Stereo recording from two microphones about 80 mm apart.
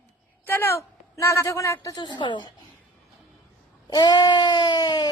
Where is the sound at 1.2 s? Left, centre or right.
Left.